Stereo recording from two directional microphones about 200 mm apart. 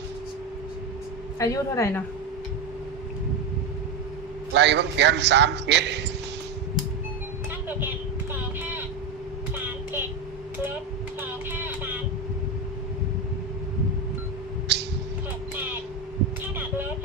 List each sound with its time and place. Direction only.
1.4 s a woman's voice: 15° left (ahead or behind)
4.5 s a man's voice: 60° right (ahead or behind)
14.7 s a sound: 60° right (ahead or behind)